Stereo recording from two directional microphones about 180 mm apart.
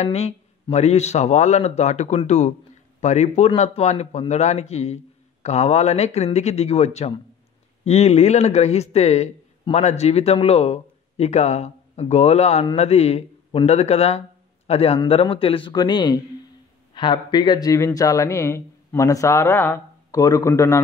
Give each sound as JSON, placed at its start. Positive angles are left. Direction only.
{"t": 0.0, "sound": "speech", "side_deg": 35}